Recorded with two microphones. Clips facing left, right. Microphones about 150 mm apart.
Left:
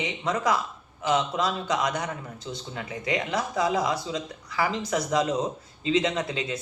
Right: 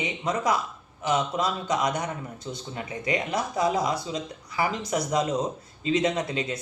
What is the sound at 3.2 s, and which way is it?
Speech, 15° right (ahead or behind).